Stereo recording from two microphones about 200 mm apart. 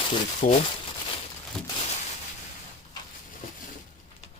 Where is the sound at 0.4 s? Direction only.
40° left (ahead or behind).